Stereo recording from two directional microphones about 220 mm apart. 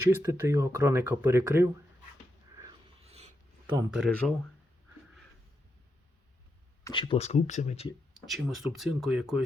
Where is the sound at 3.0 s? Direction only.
30° right (ahead or behind).